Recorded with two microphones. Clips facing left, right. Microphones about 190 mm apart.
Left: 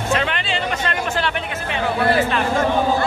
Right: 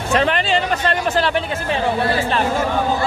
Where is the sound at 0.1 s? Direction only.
40° right (ahead or behind).